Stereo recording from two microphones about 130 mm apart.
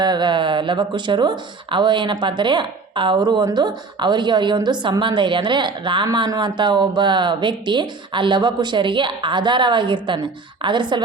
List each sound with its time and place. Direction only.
0.0 s speech: 35° right (ahead or behind)